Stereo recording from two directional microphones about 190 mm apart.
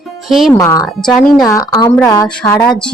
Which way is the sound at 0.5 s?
15° left (ahead or behind).